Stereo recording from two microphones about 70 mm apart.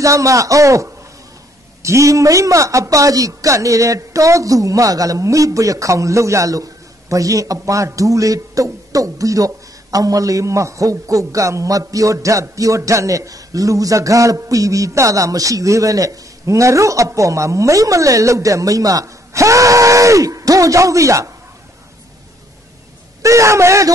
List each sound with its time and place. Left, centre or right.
0.0 s a man's voice: right
23.2 s a man's voice: right